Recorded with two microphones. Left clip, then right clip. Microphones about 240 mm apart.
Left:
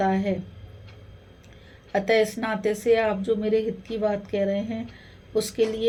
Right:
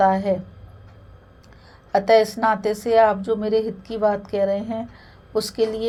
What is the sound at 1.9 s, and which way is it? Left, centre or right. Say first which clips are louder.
Speech: right 6 dB; right.